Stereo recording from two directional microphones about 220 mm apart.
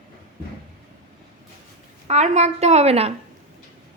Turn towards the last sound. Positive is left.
turn(degrees=-30)  # may be behind; listen again after turning